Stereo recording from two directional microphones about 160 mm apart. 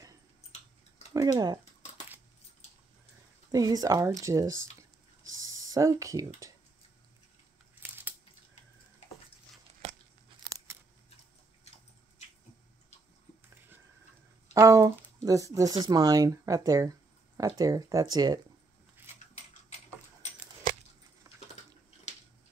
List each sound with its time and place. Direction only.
1.1 s speech: 25° right (ahead or behind)
3.5 s speech: 25° right (ahead or behind)
10.4 s a sound: 20° right (ahead or behind)
14.5 s speech: 20° right (ahead or behind)